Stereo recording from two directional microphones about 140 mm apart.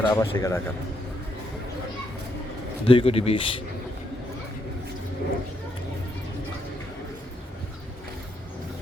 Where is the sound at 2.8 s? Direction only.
40° left (ahead or behind).